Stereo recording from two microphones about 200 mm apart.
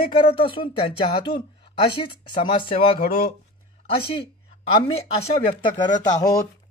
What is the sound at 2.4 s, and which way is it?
Speech, 25° left (ahead or behind).